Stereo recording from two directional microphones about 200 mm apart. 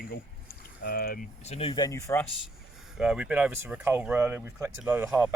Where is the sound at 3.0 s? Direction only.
5° right (ahead or behind).